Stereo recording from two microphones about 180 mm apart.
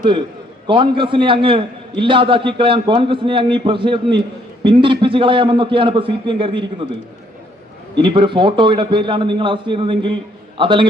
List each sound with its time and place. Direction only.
0.7 s a man's voice: 25° right (ahead or behind)
8.0 s a man's voice: 25° right (ahead or behind)